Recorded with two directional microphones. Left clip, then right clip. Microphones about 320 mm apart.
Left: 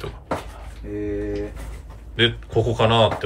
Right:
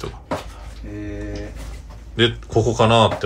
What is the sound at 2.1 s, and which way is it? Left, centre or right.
Speech, centre.